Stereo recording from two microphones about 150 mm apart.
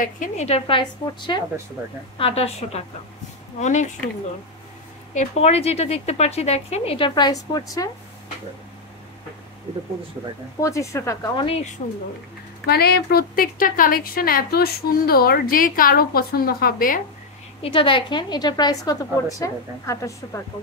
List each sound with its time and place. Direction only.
0.0 s a woman's voice: 55° left (ahead or behind)
0.7 s a woman's voice: 35° left (ahead or behind); by 3.9 s 50° left (ahead or behind)
5.1 s a woman's voice: 50° left (ahead or behind)
7.2 s a woman's voice: 25° left (ahead or behind)
10.6 s a woman's voice: 20° left (ahead or behind)
11.3 s a woman's voice: 40° left (ahead or behind)
12.6 s a woman's voice: 90° left; by 17.0 s 70° left (ahead or behind)
17.6 s a woman's voice: 35° left (ahead or behind); by 20.4 s 20° left (ahead or behind)